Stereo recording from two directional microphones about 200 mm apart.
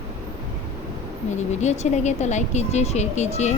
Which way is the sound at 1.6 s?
35° left (ahead or behind).